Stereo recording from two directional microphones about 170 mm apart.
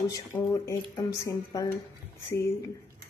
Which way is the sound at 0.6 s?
15° left (ahead or behind).